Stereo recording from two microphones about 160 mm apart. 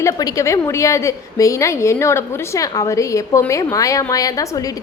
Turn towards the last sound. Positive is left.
turn(degrees=20)  # may be behind; listen again after turning